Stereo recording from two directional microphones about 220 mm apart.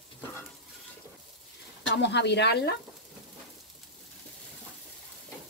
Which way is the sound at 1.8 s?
50° left (ahead or behind).